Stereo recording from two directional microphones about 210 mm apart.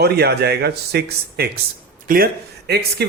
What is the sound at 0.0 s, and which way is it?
Speech, 50° right (ahead or behind).